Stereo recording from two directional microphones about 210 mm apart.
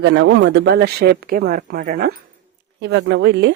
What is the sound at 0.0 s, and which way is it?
Speech, 55° right (ahead or behind).